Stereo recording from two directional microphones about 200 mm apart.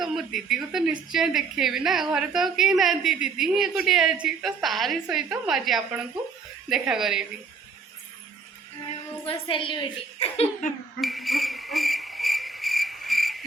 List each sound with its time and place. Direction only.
0.0 s a woman's voice: centre (ahead or behind)
9.2 s a woman's voice: 25° left (ahead or behind)
11.0 s cricket: centre (ahead or behind)